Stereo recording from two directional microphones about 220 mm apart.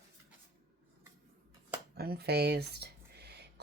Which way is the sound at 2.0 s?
45° right (ahead or behind).